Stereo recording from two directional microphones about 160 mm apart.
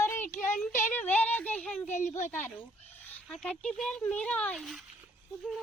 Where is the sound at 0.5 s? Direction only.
55° left (ahead or behind).